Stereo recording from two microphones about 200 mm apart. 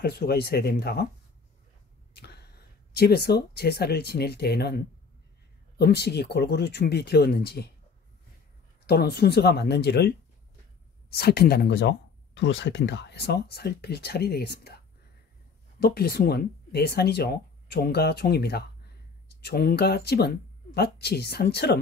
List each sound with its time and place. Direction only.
0.0 s speech: 55° left (ahead or behind)
2.1 s a sound: 55° left (ahead or behind)
3.0 s speech: 55° left (ahead or behind)
8.8 s speech: 50° left (ahead or behind)
15.8 s speech: 50° left (ahead or behind)